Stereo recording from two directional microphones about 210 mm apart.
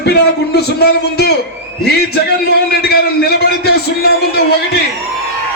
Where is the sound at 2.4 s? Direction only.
50° left (ahead or behind).